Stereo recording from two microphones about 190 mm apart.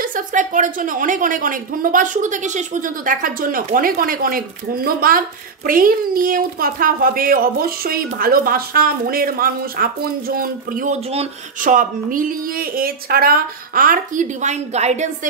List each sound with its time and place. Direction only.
0.0 s a woman's voice: 45° right (ahead or behind)